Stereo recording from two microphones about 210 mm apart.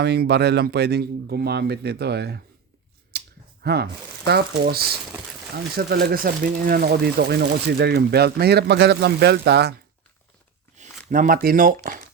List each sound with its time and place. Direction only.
0.0 s speech: 50° right (ahead or behind)
3.1 s a sound: 50° right (ahead or behind)
4.3 s speech: 50° right (ahead or behind)
10.8 s speech: 40° right (ahead or behind)